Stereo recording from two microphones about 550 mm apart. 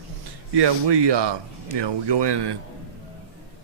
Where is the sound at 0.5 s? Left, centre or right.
Right.